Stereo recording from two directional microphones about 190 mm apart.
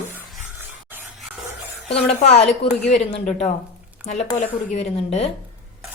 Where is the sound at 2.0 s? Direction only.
35° left (ahead or behind).